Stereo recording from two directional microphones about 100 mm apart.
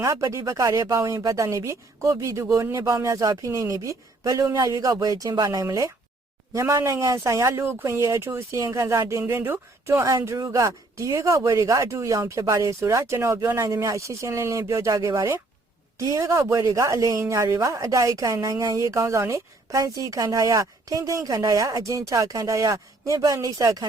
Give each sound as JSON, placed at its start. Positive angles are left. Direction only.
{"t": 0.0, "sound": "speech", "side_deg": -30}